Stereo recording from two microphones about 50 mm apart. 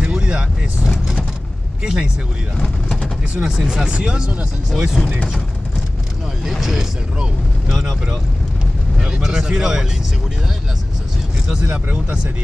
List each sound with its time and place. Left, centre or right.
0.0 s vehicle: centre
0.8 s speech: centre
2.5 s speech: centre
3.4 s speech: centre
6.4 s speech: centre
11.7 s speech: right